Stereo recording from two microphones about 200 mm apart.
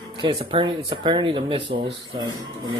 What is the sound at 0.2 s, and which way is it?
Speech, 25° right (ahead or behind).